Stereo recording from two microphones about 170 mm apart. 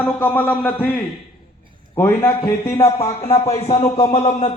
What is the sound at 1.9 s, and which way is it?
Speech, 15° left (ahead or behind).